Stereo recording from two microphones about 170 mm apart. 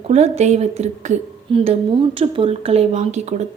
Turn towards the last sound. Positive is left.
turn(degrees=-40)  # may be behind; listen again after turning